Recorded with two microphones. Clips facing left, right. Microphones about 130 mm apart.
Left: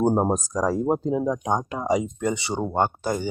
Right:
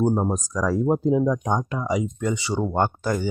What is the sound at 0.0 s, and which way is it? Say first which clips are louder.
Speech: left 1 dB; 30° left (ahead or behind).